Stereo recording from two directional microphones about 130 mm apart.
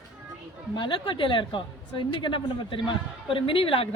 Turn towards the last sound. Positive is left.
turn(degrees=45)  # may be behind; listen again after turning